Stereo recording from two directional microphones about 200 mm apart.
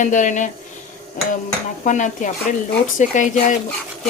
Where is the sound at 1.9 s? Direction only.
40° left (ahead or behind).